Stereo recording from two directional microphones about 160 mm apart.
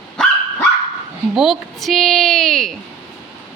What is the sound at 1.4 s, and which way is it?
A woman's voice, centre (ahead or behind).